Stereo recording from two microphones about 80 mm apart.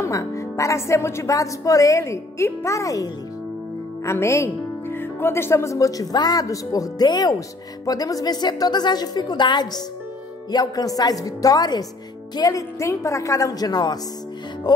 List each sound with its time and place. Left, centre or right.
0.0 s a woman's voice: left
10.5 s a woman's voice: left